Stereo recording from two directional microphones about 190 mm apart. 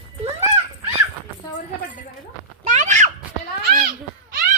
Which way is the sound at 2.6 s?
40° right (ahead or behind).